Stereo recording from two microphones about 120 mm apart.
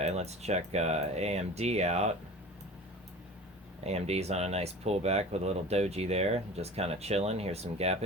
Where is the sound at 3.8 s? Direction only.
60° right (ahead or behind).